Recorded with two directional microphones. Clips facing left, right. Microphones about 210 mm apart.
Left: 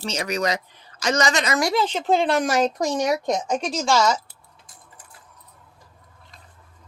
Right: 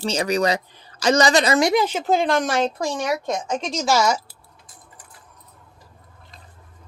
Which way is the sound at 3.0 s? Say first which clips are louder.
Left 2 dB; 35° left (ahead or behind).